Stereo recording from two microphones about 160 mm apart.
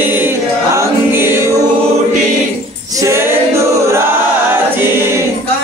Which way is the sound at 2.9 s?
15° right (ahead or behind).